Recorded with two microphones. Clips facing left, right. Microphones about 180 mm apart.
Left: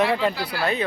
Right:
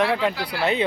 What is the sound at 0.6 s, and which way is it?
Speech, 25° right (ahead or behind).